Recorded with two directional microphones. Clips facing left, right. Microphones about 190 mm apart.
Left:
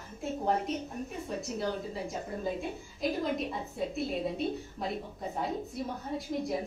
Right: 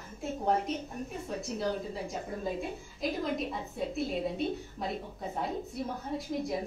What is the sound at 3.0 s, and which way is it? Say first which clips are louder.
A woman's voice: left 1 dB; centre (ahead or behind).